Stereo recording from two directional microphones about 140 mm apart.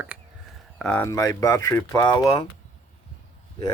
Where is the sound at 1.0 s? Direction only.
20° left (ahead or behind).